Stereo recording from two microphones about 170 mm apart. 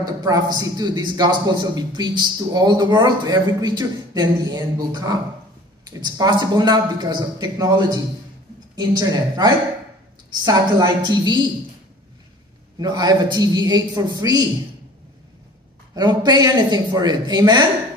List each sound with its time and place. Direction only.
0.0 s a man's voice: 20° right (ahead or behind)
12.7 s a man's voice: 25° right (ahead or behind)
15.9 s a man's voice: 25° right (ahead or behind)